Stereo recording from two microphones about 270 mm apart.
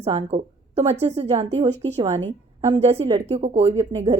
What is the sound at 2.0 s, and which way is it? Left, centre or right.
A woman's voice, right.